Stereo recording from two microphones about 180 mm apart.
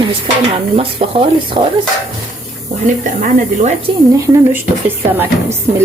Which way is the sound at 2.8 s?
45° right (ahead or behind).